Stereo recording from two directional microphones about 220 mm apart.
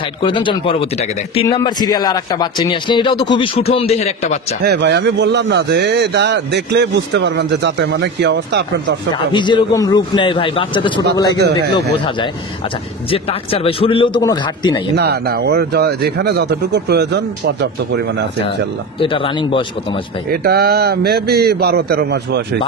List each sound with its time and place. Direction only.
0.2 s a man's voice: 20° left (ahead or behind)
4.6 s a man's voice: 50° right (ahead or behind)
9.3 s a man's voice: 20° left (ahead or behind)
11.3 s a man's voice: 50° right (ahead or behind)
13.1 s a man's voice: 25° left (ahead or behind)
15.0 s a man's voice: 45° right (ahead or behind)
18.9 s a man's voice: 25° left (ahead or behind)
20.2 s a man's voice: 45° right (ahead or behind)